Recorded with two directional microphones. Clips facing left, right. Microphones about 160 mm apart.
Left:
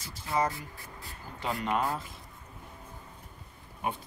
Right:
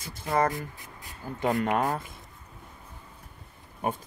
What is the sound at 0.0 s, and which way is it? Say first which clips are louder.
Speech: right 4 dB; 55° right (ahead or behind).